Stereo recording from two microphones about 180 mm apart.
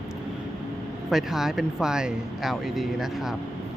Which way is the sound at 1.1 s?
Centre (ahead or behind).